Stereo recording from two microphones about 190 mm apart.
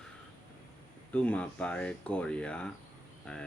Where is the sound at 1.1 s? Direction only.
5° left (ahead or behind).